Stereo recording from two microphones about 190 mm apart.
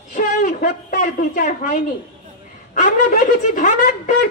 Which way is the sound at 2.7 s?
45° left (ahead or behind).